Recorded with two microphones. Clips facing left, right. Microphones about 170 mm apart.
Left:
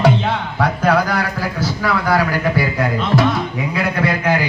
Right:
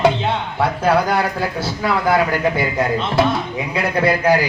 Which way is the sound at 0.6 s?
25° right (ahead or behind).